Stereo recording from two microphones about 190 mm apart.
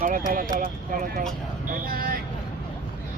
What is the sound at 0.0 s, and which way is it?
Speech, 45° right (ahead or behind).